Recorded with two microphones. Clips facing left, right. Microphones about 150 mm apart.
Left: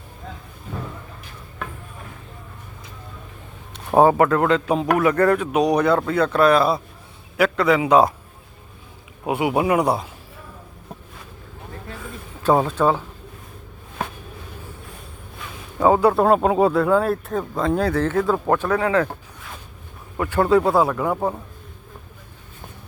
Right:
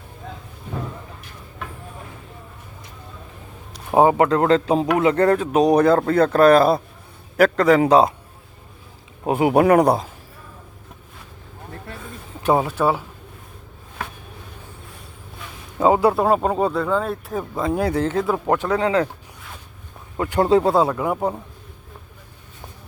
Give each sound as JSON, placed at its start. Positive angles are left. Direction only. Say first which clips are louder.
{"t": 4.2, "sound": "a man's voice", "louder": "right 1 dB", "side_deg": -25}
{"t": 9.2, "sound": "speech", "louder": "right 3 dB", "side_deg": -40}
{"t": 9.6, "sound": "speech", "louder": "right 6 dB", "side_deg": -55}
{"t": 12.5, "sound": "speech", "louder": "left 1 dB", "side_deg": -10}
{"t": 15.8, "sound": "speech", "louder": "even", "side_deg": -15}
{"t": 16.1, "sound": "a man's voice", "louder": "left 2 dB", "side_deg": 0}
{"t": 20.1, "sound": "a man's voice", "louder": "even", "side_deg": -25}